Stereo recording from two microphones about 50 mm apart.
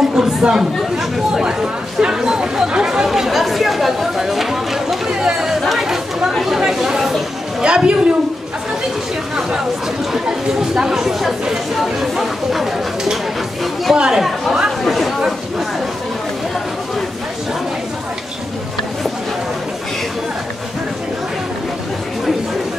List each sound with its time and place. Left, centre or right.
0.0 s chatter: centre
0.9 s speech: centre
5.6 s chatter: centre
6.6 s speech: centre
7.6 s a woman's voice: centre
10.2 s speech: centre
13.9 s speech: centre